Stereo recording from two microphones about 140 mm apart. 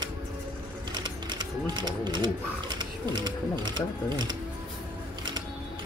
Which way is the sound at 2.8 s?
30° right (ahead or behind).